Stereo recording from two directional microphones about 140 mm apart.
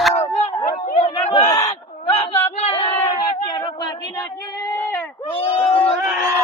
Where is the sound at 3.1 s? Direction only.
30° left (ahead or behind).